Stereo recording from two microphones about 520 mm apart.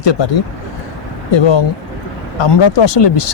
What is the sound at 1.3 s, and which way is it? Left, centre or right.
Speech, left.